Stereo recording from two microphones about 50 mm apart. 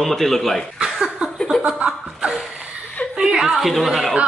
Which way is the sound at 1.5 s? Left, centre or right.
Centre.